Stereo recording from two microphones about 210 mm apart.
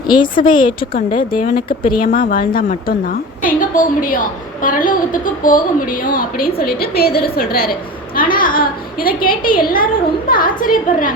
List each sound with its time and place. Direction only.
0.1 s speech: 20° left (ahead or behind)
1.4 s a woman's voice: 40° left (ahead or behind)